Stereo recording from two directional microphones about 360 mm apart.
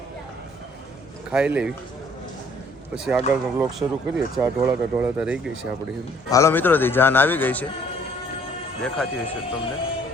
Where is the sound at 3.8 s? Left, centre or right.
Centre.